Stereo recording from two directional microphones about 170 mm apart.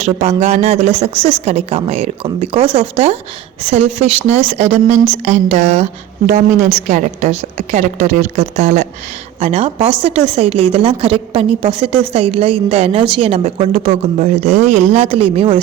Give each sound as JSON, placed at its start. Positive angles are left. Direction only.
{"t": 0.0, "sound": "a woman's voice", "side_deg": -40}